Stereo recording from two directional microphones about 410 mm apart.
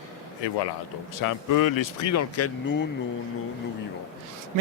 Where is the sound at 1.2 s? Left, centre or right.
Left.